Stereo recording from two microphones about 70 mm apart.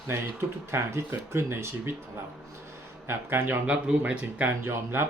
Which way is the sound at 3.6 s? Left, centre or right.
Centre.